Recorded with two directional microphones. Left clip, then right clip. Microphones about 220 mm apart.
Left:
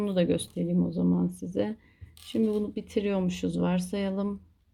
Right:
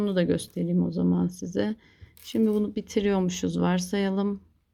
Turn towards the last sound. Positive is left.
turn(degrees=-25)  # may be behind; listen again after turning